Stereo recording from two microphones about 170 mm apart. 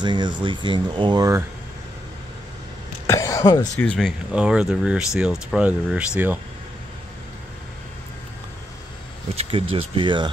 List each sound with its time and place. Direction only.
0.0 s speech: 25° right (ahead or behind)
3.1 s speech: 20° left (ahead or behind)
3.8 s speech: 5° left (ahead or behind)
9.3 s speech: 35° right (ahead or behind)